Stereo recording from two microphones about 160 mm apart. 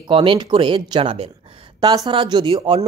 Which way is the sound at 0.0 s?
30° right (ahead or behind).